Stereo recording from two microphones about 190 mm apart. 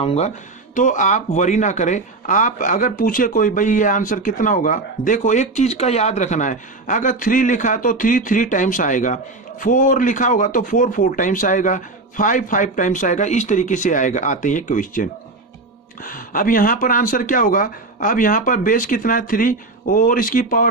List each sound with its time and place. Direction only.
0.0 s speech: 30° left (ahead or behind)